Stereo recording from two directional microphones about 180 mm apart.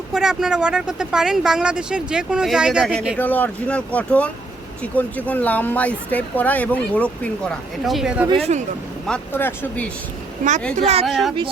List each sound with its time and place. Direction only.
0.1 s speech: 5° right (ahead or behind)
8.5 s a woman's voice: 40° right (ahead or behind)
9.0 s speech: 10° left (ahead or behind)
10.8 s a woman's voice: 35° right (ahead or behind)
11.0 s speech: centre (ahead or behind)